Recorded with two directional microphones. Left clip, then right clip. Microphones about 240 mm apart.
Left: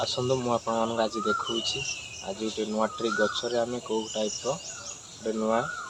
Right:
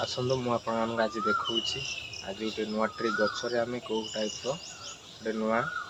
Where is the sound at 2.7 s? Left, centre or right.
Centre.